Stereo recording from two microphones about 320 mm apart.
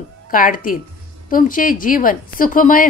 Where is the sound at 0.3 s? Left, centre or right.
Left.